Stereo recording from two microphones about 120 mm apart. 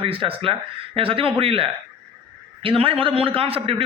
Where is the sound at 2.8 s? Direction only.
50° right (ahead or behind).